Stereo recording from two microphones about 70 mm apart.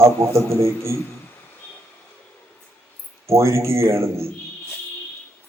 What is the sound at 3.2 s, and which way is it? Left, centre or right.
Speech, right.